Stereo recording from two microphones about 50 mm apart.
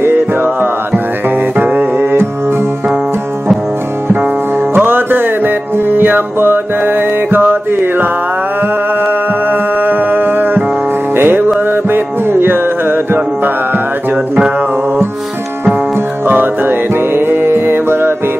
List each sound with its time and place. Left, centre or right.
0.0 s music: right
4.7 s music: right
16.3 s music: right